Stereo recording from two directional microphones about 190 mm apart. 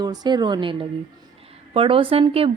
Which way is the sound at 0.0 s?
20° right (ahead or behind).